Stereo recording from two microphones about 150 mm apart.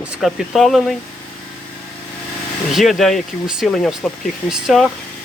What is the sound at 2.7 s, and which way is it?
Speech, centre (ahead or behind).